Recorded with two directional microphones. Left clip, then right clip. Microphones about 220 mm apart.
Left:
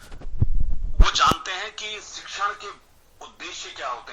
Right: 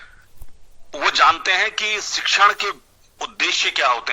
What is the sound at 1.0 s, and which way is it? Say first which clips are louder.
A man's voice: right 5 dB; 40° right (ahead or behind).